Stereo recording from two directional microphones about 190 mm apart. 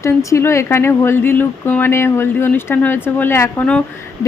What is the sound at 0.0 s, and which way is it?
Speech, 15° left (ahead or behind).